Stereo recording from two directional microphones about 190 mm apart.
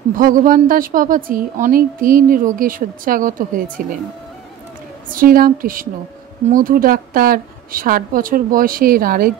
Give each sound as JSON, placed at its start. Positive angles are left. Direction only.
{"t": 0.2, "sound": "a woman's voice", "side_deg": -45}
{"t": 5.1, "sound": "a woman's voice", "side_deg": -50}